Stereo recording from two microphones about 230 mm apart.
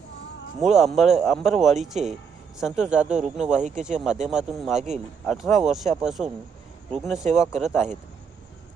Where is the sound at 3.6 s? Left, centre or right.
Right.